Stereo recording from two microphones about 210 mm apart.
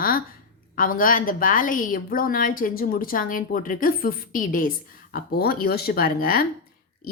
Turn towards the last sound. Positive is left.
turn(degrees=45)  # may be behind; listen again after turning